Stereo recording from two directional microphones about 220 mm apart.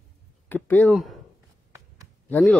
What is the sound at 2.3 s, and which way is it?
Speech, 5° left (ahead or behind).